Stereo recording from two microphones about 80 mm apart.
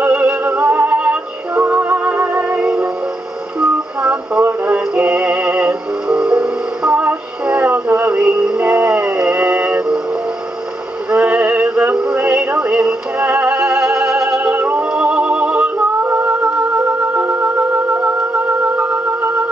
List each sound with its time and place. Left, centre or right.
0.0 s music: centre
11.1 s synthetic singing: centre
14.5 s music: right